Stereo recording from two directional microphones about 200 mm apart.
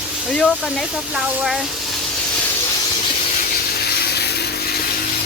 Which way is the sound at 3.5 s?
50° left (ahead or behind).